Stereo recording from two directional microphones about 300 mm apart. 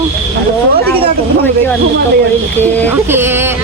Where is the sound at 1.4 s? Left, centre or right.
Centre.